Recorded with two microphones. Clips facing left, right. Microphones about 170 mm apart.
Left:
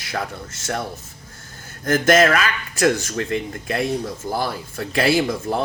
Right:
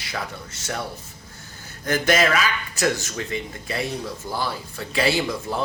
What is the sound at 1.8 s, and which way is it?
Speech, 50° left (ahead or behind).